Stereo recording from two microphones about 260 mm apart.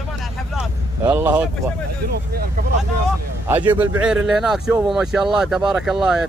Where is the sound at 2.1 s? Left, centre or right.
Right.